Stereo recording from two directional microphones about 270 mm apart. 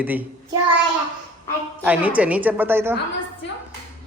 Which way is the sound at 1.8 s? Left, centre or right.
Centre.